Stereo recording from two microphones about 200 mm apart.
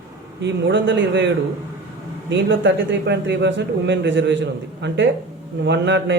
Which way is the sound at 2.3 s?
65° right (ahead or behind).